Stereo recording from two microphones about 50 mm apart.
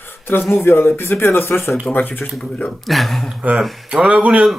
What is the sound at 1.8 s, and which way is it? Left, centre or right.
Speech, left.